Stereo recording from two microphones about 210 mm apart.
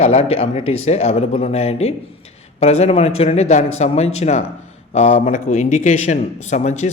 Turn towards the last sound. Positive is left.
turn(degrees=35)  # may be behind; listen again after turning